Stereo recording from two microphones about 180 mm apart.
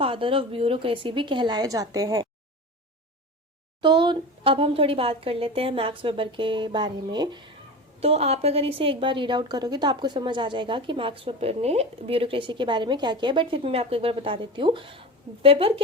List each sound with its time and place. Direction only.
0.0 s a woman's voice: 30° right (ahead or behind)
3.8 s a woman's voice: 25° right (ahead or behind)
8.0 s a woman's voice: 35° right (ahead or behind)